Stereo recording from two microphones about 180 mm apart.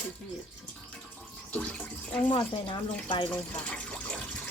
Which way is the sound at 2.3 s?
30° left (ahead or behind).